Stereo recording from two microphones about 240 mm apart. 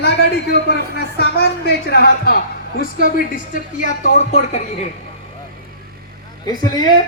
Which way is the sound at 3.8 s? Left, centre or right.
Left.